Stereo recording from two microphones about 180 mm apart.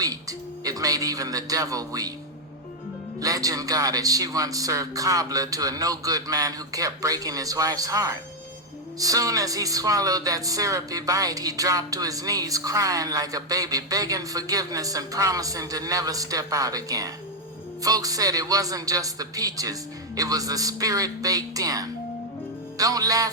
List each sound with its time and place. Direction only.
0.0 s speech: 20° right (ahead or behind)
3.2 s speech: 20° right (ahead or behind)